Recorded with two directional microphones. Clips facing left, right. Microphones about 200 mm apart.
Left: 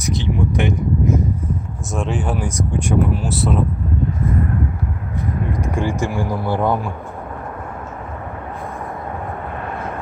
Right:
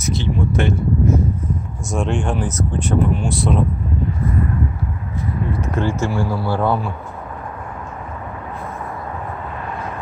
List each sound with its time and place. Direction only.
0.0 s speech: 15° left (ahead or behind)
1.9 s speech: centre (ahead or behind)
5.5 s speech: 10° left (ahead or behind)